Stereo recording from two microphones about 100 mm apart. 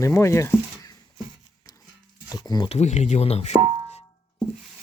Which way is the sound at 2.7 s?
90° left.